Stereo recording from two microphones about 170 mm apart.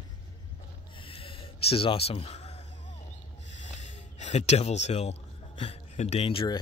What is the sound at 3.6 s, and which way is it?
Speech, 45° left (ahead or behind).